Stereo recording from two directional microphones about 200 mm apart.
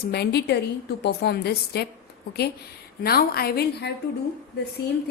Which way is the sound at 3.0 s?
50° left (ahead or behind).